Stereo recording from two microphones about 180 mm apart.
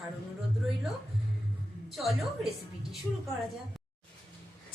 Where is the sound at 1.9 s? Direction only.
Centre (ahead or behind).